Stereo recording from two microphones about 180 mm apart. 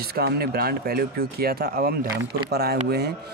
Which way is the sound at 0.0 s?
60° right (ahead or behind).